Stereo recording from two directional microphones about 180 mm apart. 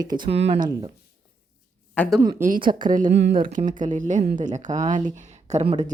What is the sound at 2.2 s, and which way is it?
Speech, 20° right (ahead or behind).